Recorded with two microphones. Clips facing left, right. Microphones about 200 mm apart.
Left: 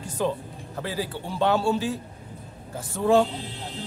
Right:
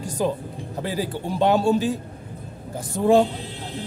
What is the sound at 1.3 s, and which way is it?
Speech, 15° right (ahead or behind).